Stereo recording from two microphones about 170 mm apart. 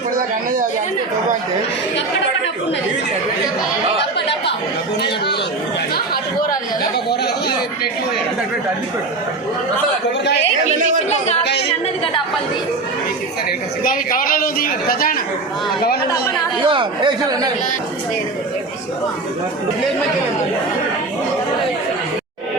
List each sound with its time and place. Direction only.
5.0 s chatter: 75° left (ahead or behind)
13.8 s a woman's voice: 55° left (ahead or behind)
16.6 s speech: 30° right (ahead or behind)